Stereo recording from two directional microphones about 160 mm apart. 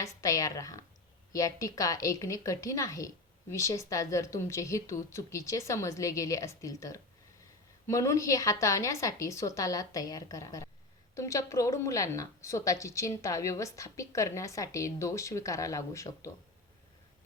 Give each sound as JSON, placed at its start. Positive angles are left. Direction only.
{"t": 0.0, "sound": "a woman's voice", "side_deg": 20}